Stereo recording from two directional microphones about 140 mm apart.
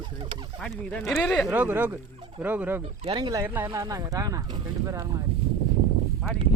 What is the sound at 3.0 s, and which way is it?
Speech, 35° right (ahead or behind).